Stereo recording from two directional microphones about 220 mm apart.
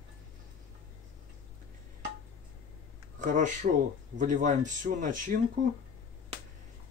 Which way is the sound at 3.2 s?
35° right (ahead or behind).